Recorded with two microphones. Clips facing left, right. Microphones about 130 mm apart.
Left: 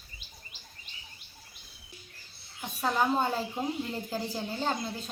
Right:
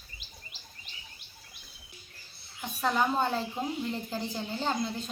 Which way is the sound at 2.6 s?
5° left (ahead or behind).